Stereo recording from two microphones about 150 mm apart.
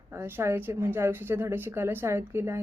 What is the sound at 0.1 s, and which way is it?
A woman's voice, 15° right (ahead or behind).